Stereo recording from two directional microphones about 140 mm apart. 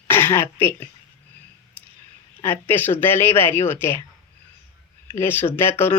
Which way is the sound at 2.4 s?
15° left (ahead or behind).